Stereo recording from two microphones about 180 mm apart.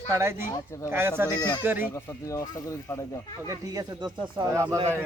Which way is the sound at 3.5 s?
20° right (ahead or behind).